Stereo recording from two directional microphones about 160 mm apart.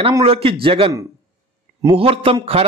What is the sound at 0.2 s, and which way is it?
A man's voice, 35° right (ahead or behind).